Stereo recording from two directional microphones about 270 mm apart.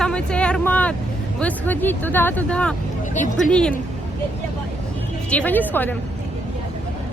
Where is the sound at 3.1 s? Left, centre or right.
Left.